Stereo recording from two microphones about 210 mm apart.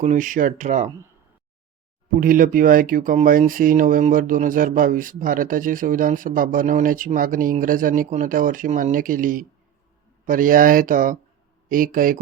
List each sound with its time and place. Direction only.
0.0 s speech: 35° right (ahead or behind)
2.2 s speech: 40° right (ahead or behind)